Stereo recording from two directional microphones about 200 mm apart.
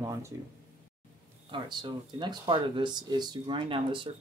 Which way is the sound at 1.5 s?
20° right (ahead or behind).